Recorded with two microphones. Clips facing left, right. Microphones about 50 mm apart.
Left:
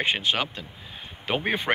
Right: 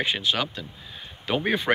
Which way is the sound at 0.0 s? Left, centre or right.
Left.